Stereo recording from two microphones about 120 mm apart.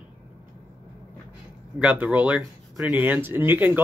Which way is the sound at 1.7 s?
10° right (ahead or behind).